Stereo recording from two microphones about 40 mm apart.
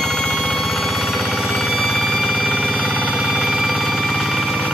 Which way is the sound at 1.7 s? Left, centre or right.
Centre.